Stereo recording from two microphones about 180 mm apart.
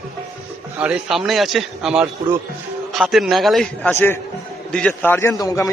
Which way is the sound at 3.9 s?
10° left (ahead or behind).